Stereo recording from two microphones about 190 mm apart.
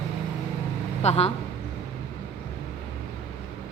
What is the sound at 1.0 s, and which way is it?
Speech, 35° left (ahead or behind).